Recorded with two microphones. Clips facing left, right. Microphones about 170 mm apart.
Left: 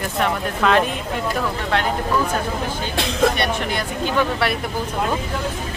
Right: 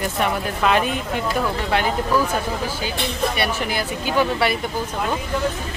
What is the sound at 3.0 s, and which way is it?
Speech, 90° left.